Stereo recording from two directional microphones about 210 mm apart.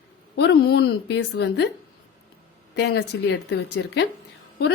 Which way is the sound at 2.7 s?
50° left (ahead or behind).